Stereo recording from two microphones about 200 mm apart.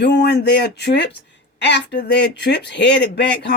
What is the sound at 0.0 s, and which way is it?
A woman's voice, 60° left (ahead or behind).